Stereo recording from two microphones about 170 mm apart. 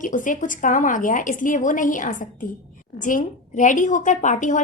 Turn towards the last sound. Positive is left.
turn(degrees=45)  # may be behind; listen again after turning